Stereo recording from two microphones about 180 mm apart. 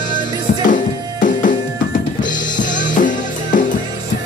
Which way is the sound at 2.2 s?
45° left (ahead or behind).